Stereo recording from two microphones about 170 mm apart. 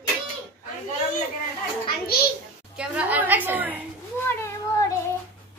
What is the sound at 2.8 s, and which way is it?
A woman's voice, 10° right (ahead or behind).